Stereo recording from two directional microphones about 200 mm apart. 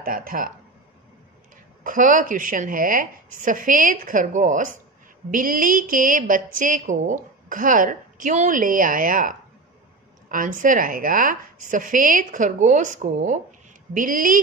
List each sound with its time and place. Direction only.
0.0 s a woman's voice: 45° right (ahead or behind)
1.8 s a woman's voice: 40° right (ahead or behind)
10.3 s a woman's voice: 40° right (ahead or behind)